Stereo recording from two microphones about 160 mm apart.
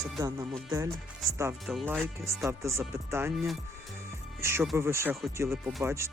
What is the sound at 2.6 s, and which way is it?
Speech, 15° right (ahead or behind).